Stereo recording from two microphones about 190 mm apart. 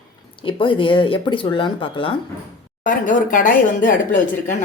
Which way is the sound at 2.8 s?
45° left (ahead or behind).